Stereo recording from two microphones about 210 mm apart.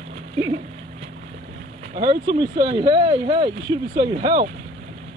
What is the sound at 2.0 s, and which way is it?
Speech, 20° right (ahead or behind).